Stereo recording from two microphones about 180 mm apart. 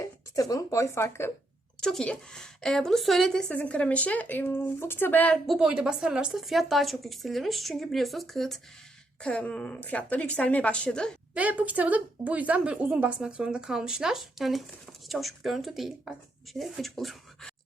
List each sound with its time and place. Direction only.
0.0 s speech: 20° left (ahead or behind)
1.8 s a woman's voice: 5° left (ahead or behind)
11.3 s a woman's voice: 10° right (ahead or behind)